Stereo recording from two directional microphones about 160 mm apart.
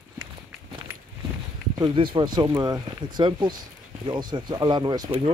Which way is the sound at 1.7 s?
25° right (ahead or behind).